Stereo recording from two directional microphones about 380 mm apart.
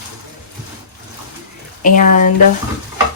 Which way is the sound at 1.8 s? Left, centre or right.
Left.